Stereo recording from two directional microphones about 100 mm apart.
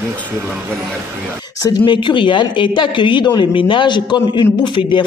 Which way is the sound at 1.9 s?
55° left (ahead or behind).